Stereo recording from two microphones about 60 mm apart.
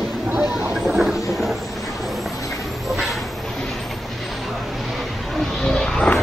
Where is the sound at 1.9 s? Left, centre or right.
Centre.